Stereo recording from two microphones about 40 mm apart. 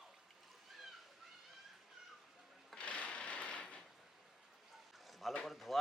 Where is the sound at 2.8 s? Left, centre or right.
Left.